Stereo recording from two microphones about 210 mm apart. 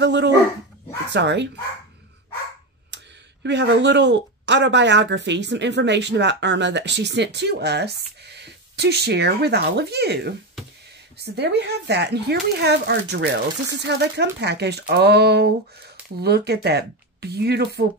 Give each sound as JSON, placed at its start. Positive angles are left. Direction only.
{"t": 0.0, "sound": "speech", "side_deg": -55}
{"t": 2.9, "sound": "a sound", "side_deg": -55}
{"t": 3.4, "sound": "speech", "side_deg": -55}